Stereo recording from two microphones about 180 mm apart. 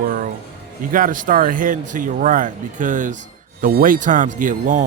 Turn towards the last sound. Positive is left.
turn(degrees=-45)  # may be behind; listen again after turning